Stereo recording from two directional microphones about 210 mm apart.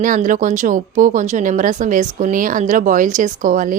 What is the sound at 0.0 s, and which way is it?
Speech, 40° right (ahead or behind).